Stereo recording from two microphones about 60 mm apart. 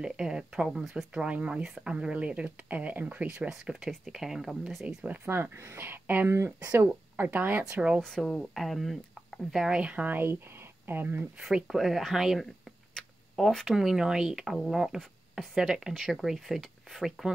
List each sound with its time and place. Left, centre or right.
0.0 s speech: centre
1.2 s speech: centre
3.4 s speech: centre
5.0 s speech: right
6.2 s speech: right
7.2 s speech: right
8.0 s speech: centre
9.8 s speech: centre
10.0 s speech: right
11.6 s speech: centre
13.7 s speech: centre
15.9 s speech: centre